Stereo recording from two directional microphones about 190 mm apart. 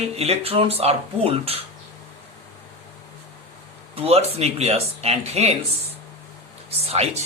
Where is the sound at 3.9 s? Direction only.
30° right (ahead or behind).